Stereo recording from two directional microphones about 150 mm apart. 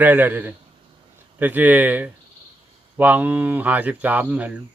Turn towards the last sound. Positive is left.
turn(degrees=-10)  # may be behind; listen again after turning